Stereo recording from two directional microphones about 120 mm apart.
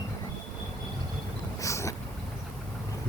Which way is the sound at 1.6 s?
25° left (ahead or behind).